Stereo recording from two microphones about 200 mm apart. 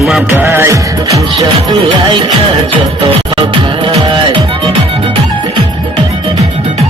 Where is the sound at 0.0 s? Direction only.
Centre (ahead or behind).